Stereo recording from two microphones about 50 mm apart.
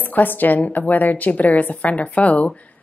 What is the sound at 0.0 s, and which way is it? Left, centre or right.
Speech, left.